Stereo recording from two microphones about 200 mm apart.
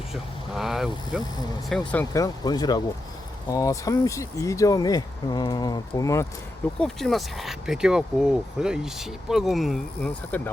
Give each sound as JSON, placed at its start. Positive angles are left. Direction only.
{"t": 0.1, "sound": "speech", "side_deg": 0}
{"t": 6.7, "sound": "speech", "side_deg": 0}